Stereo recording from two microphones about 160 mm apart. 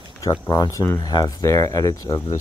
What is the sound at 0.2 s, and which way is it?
Speech, 20° left (ahead or behind).